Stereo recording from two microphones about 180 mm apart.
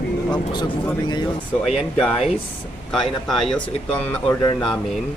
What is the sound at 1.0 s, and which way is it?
Speech, 25° left (ahead or behind).